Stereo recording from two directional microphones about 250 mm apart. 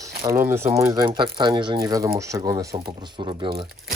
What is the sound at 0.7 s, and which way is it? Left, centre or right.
Speech, centre.